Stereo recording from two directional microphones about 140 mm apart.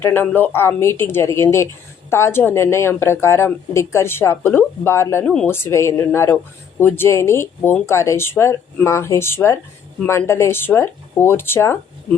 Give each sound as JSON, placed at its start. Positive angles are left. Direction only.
{"t": 0.0, "sound": "a woman's voice", "side_deg": 15}
{"t": 5.2, "sound": "speech", "side_deg": 5}
{"t": 5.5, "sound": "a woman's voice", "side_deg": 20}